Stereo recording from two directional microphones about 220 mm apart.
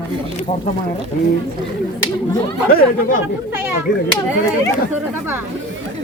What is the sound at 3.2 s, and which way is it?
Speech, 10° right (ahead or behind).